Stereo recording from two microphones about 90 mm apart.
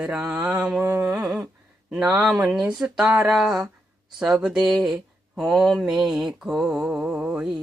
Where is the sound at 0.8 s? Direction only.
30° right (ahead or behind).